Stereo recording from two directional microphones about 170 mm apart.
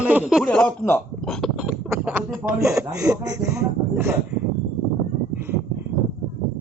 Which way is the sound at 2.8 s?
20° right (ahead or behind).